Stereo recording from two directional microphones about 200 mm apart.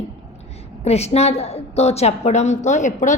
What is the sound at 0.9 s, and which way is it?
A woman's voice, 30° left (ahead or behind).